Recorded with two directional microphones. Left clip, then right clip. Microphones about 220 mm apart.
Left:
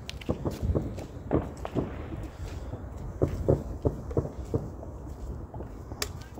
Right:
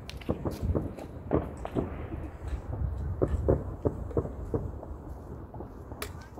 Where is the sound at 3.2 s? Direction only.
5° right (ahead or behind).